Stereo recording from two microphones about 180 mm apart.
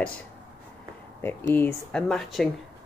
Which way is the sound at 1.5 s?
10° left (ahead or behind).